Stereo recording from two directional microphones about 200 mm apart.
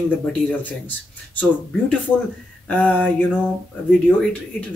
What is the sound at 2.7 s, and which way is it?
Speech, 10° left (ahead or behind).